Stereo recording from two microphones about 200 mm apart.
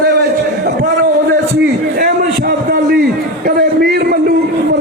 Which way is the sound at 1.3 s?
60° right (ahead or behind).